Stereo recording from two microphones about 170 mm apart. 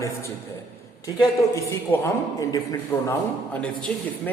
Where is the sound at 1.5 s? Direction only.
15° left (ahead or behind).